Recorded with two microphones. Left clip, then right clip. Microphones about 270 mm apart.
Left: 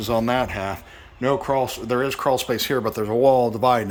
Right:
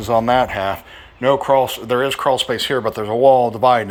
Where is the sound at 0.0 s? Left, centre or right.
Centre.